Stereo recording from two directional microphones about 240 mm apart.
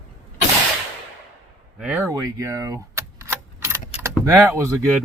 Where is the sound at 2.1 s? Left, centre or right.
Centre.